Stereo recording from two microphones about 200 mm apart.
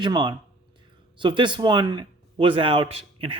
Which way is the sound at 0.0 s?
20° right (ahead or behind).